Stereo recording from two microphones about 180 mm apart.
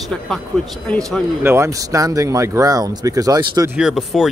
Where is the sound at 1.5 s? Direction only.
15° right (ahead or behind).